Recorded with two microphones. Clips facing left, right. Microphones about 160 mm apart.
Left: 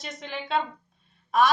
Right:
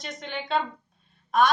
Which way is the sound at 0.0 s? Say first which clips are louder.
Right 1 dB; centre (ahead or behind).